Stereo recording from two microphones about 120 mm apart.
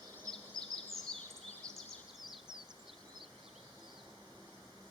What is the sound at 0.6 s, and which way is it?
Bird vocalization, 5° left (ahead or behind).